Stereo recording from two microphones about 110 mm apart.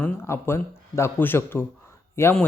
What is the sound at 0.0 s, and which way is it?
Speech, 20° left (ahead or behind).